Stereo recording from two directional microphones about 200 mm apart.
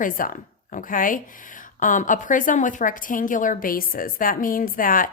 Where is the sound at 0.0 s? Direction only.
40° left (ahead or behind).